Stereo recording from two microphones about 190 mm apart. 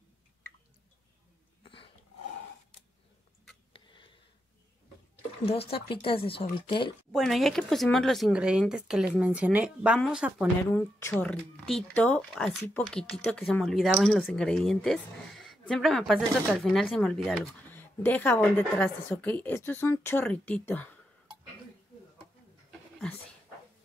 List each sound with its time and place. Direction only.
1.6 s a sound: 30° left (ahead or behind)
3.7 s a sound: 25° left (ahead or behind)
5.4 s speech: 30° left (ahead or behind)
7.1 s speech: centre (ahead or behind)
10.7 s speech: 10° left (ahead or behind)
22.7 s dog: 5° left (ahead or behind)